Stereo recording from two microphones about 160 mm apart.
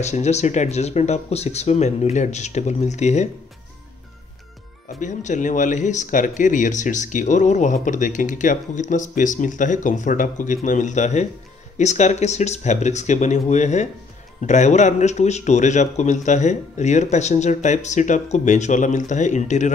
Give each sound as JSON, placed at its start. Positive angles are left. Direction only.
{"t": 0.0, "sound": "speech", "side_deg": 45}
{"t": 4.8, "sound": "speech", "side_deg": 50}